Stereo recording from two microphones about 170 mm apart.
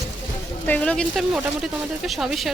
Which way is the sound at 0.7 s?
5° left (ahead or behind).